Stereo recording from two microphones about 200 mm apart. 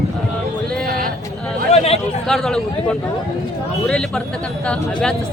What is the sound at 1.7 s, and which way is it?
Chatter, 30° left (ahead or behind).